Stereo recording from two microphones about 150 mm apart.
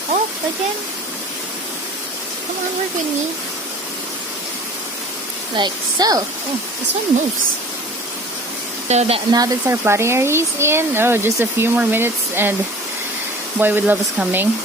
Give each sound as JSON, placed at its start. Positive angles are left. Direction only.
{"t": 5.5, "sound": "speech", "side_deg": -30}
{"t": 8.9, "sound": "speech", "side_deg": -45}
{"t": 9.3, "sound": "speech", "side_deg": -20}
{"t": 13.6, "sound": "speech", "side_deg": -10}